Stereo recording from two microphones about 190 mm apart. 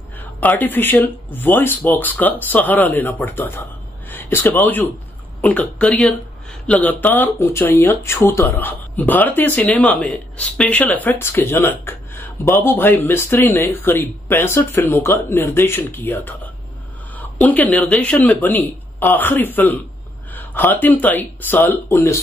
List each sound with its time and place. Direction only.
0.2 s speech: 10° left (ahead or behind)